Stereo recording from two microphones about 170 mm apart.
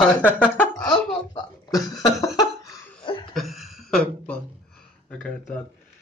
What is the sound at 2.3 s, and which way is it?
Laughter, 25° left (ahead or behind).